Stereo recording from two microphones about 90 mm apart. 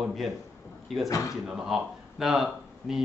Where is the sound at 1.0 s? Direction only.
35° left (ahead or behind).